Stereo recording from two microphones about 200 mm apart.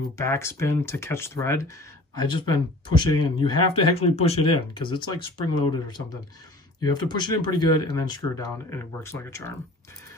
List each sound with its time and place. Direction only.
0.2 s speech: 15° left (ahead or behind)